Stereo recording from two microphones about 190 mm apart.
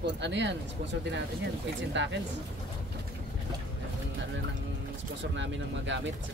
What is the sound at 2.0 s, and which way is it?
Speech, 70° right (ahead or behind).